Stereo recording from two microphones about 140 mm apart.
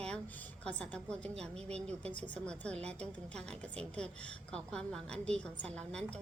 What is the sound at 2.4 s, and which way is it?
A woman's voice, 5° left (ahead or behind).